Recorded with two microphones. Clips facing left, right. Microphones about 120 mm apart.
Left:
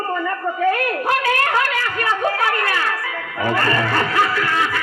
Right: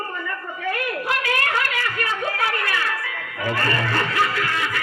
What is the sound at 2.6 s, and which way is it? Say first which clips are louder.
Music: left 4 dB; 45° left (ahead or behind).